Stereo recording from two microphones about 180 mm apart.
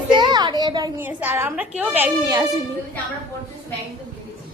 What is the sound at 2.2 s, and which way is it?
Speech, 20° right (ahead or behind).